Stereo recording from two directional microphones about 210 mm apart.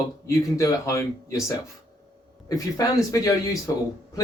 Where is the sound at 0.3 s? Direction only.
15° left (ahead or behind).